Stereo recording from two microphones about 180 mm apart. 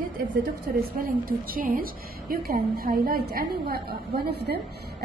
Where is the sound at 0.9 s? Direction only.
55° right (ahead or behind).